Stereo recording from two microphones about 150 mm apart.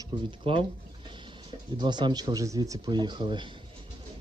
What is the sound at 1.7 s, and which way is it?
Speech, 30° right (ahead or behind).